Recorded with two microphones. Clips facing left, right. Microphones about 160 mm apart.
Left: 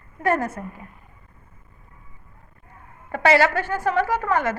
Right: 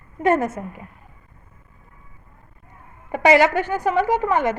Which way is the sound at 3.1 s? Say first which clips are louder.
Right 3 dB; 15° right (ahead or behind).